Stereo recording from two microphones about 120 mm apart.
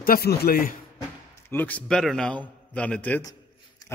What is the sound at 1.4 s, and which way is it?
Speech, 15° left (ahead or behind).